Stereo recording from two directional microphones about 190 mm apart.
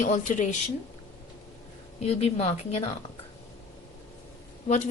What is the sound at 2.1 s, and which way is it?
Speech, 35° left (ahead or behind).